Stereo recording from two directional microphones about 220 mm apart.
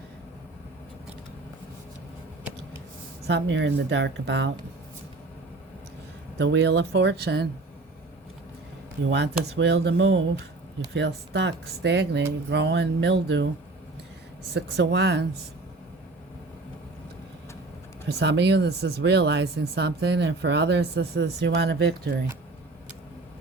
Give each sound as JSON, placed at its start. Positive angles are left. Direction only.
{"t": 3.2, "sound": "speech", "side_deg": -50}
{"t": 6.3, "sound": "speech", "side_deg": -50}
{"t": 9.0, "sound": "speech", "side_deg": -50}
{"t": 14.5, "sound": "speech", "side_deg": -50}
{"t": 18.2, "sound": "speech", "side_deg": -50}